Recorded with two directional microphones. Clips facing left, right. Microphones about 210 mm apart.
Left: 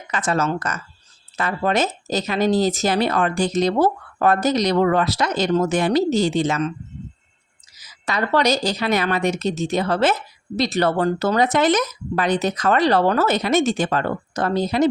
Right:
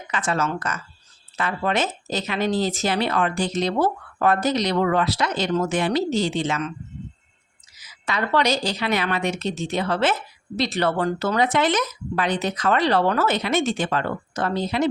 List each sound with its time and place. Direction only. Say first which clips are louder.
0.1 s speech: left 3 dB; 40° left (ahead or behind)
7.8 s speech: left 2 dB; 40° left (ahead or behind)